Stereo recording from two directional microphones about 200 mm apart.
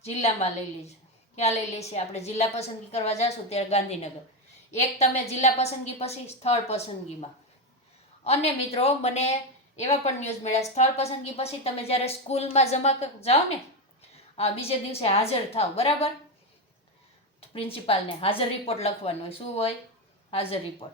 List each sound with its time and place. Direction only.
0.0 s a woman's voice: 30° left (ahead or behind)
1.4 s a woman's voice: 35° left (ahead or behind)
17.5 s a woman's voice: 30° left (ahead or behind)